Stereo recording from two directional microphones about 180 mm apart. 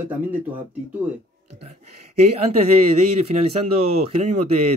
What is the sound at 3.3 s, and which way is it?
Speech, 40° right (ahead or behind).